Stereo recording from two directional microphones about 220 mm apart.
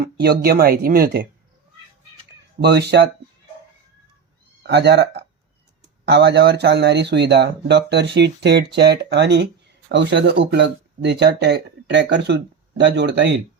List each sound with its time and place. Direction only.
0.0 s speech: 45° right (ahead or behind)
2.6 s speech: 50° right (ahead or behind)
4.6 s speech: 50° right (ahead or behind)